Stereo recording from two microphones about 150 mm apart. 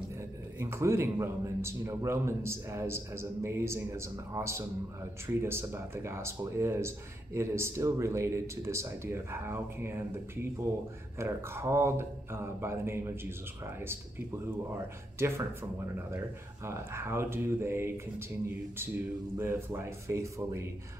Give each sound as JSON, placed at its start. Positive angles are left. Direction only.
{"t": 0.6, "sound": "a man's voice", "side_deg": -15}
{"t": 14.7, "sound": "a man's voice", "side_deg": -15}
{"t": 16.6, "sound": "a man's voice", "side_deg": -15}
{"t": 19.3, "sound": "speech", "side_deg": -15}